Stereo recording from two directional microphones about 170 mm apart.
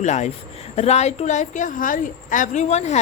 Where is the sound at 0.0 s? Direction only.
45° left (ahead or behind).